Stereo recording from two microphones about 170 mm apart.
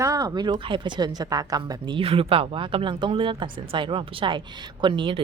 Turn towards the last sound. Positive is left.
turn(degrees=-30)  # may be behind; listen again after turning